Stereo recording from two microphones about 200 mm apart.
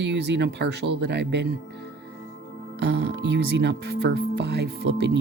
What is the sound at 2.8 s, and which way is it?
Speech, 60° right (ahead or behind).